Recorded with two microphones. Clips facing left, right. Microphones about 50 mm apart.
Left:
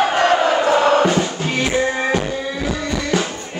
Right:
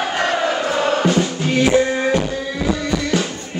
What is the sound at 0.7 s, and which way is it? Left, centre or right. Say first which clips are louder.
Music: left 5 dB; left.